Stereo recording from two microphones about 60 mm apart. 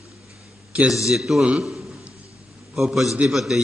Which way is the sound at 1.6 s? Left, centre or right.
Centre.